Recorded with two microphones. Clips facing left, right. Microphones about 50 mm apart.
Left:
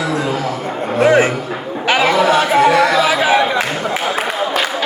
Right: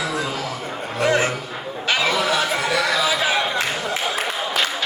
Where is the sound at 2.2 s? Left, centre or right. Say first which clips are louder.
Left 7 dB; left.